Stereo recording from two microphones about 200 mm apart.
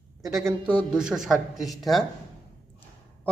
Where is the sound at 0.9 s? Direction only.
5° right (ahead or behind).